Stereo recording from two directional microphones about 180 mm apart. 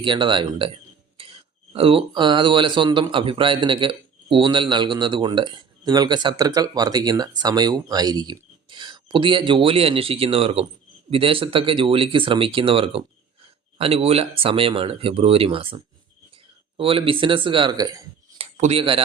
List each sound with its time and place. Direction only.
0.0 s speech: 25° right (ahead or behind)
18.3 s speech: 35° right (ahead or behind)